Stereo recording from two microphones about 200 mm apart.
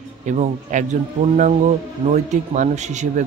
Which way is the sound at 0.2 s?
35° right (ahead or behind).